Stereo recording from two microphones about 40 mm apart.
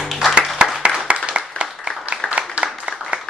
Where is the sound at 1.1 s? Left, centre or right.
Right.